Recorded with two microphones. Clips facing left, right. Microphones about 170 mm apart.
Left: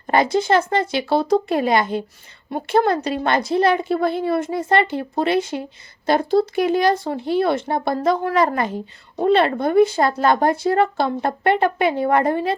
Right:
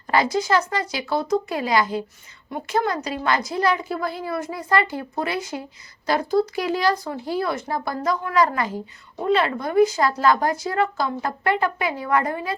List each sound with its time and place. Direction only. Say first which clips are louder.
0.2 s speech: left 4 dB; 25° left (ahead or behind)
1.8 s a woman's voice: left 1 dB; 65° left (ahead or behind)
2.5 s speech: left 6 dB; 30° left (ahead or behind)
6.3 s speech: left 1 dB; 70° left (ahead or behind)
6.7 s speech: left 4 dB; 20° left (ahead or behind)